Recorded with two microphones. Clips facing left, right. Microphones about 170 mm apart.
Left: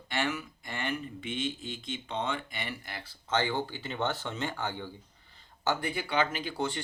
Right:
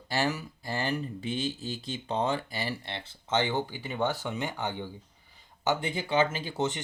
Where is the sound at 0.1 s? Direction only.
35° right (ahead or behind).